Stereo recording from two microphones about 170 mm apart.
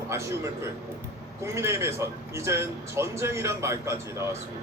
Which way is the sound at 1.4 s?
15° right (ahead or behind).